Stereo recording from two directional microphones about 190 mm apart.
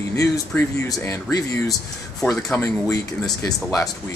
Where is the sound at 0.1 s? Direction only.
15° left (ahead or behind).